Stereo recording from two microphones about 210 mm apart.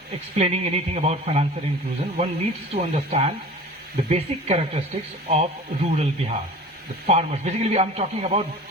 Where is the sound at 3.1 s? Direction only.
30° right (ahead or behind).